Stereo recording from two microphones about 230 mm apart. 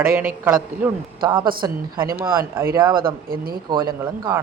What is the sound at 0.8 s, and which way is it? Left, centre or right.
Speech, centre.